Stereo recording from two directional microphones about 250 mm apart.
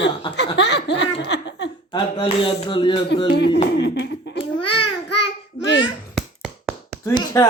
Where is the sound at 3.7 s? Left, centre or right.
Left.